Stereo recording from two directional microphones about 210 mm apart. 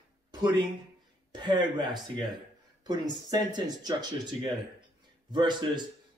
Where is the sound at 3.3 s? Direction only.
20° right (ahead or behind).